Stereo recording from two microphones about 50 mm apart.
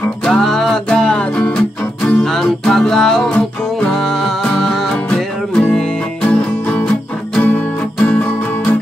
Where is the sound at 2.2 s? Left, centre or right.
Centre.